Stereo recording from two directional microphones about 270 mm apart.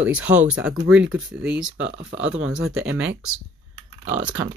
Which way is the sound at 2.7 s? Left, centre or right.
Centre.